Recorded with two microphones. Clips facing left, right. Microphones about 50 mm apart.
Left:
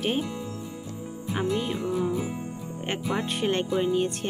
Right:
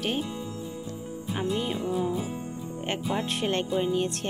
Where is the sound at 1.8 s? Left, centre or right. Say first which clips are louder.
Left 1 dB; left.